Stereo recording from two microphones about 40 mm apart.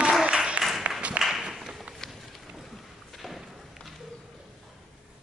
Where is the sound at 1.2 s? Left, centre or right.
Right.